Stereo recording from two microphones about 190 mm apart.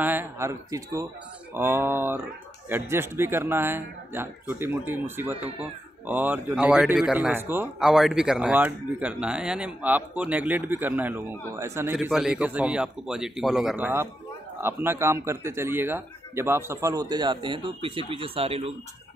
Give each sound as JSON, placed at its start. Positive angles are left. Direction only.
{"t": 0.0, "sound": "a man's voice", "side_deg": -10}